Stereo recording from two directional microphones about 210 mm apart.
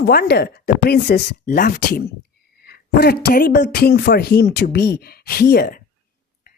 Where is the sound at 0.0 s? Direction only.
50° left (ahead or behind).